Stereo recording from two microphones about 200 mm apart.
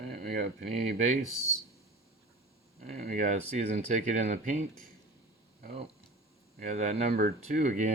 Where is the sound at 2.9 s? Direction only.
35° right (ahead or behind).